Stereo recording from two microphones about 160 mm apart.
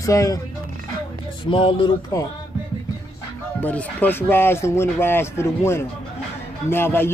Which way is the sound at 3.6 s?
10° left (ahead or behind).